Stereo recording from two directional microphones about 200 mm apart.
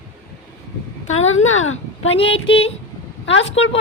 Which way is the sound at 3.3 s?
70° left (ahead or behind).